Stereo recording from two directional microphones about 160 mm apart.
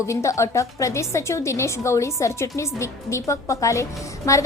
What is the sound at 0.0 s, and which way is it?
A woman's voice, 20° left (ahead or behind).